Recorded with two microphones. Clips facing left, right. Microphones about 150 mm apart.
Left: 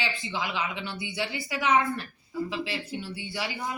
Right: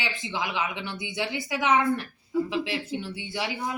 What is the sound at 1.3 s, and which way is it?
Speech, 90° right.